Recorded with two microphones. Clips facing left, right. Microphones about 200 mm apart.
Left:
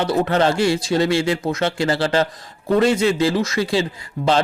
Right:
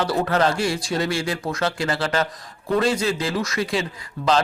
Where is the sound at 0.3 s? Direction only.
25° left (ahead or behind).